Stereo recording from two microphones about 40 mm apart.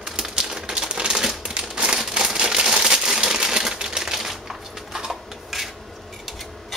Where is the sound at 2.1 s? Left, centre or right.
Centre.